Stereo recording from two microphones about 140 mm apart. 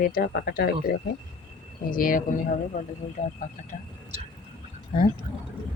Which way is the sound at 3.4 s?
75° left (ahead or behind).